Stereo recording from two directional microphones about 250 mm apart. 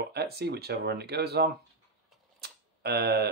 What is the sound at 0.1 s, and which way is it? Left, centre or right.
Speech, right.